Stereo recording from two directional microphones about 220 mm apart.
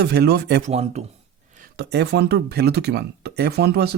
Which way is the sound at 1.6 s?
50° right (ahead or behind).